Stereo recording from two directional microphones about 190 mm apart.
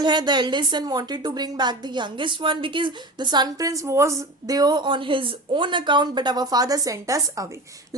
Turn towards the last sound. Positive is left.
turn(degrees=-15)  # may be behind; listen again after turning